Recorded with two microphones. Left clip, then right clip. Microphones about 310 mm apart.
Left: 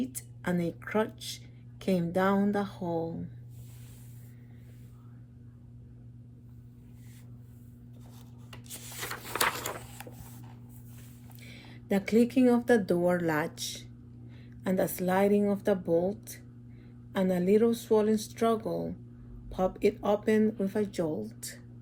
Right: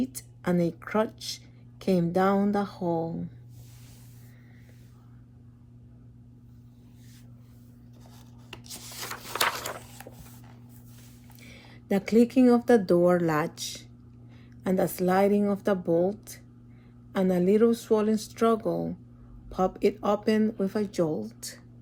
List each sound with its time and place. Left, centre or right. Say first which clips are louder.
0.4 s speech: right 5 dB; right
1.8 s speech: right 4 dB; right
2.1 s speech: right 2 dB; right
8.4 s a sound: right 4 dB; centre
11.3 s a sound: even; right
12.5 s speech: right 4 dB; right